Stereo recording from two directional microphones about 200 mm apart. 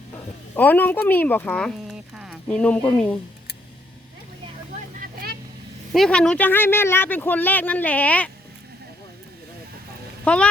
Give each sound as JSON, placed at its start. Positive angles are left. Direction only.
{"t": 0.5, "sound": "speech", "side_deg": 10}
{"t": 4.9, "sound": "vehicle", "side_deg": -50}
{"t": 5.9, "sound": "speech", "side_deg": 5}
{"t": 10.2, "sound": "speech", "side_deg": 5}